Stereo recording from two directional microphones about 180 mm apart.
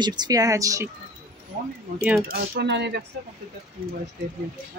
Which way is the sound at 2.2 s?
55° right (ahead or behind).